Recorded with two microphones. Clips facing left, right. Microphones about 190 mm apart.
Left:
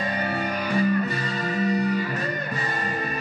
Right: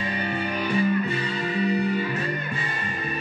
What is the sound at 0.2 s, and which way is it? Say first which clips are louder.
Music: even; 40° left (ahead or behind).